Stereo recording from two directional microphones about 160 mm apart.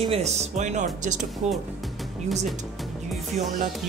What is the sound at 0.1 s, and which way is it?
Speech, 45° right (ahead or behind).